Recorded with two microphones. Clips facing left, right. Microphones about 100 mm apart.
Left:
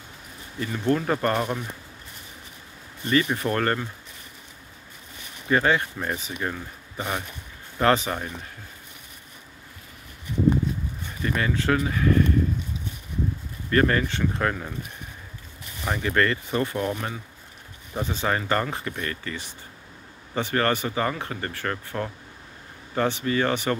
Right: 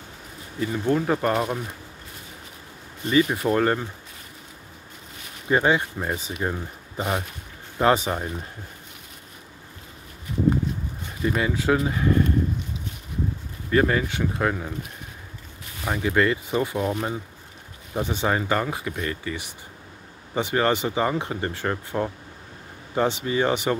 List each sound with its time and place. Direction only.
0.6 s speech: 10° right (ahead or behind)
3.1 s speech: 10° right (ahead or behind)
5.5 s speech: 15° right (ahead or behind)
11.2 s speech: 15° right (ahead or behind)
13.7 s speech: 10° right (ahead or behind)
15.8 s speech: 10° right (ahead or behind)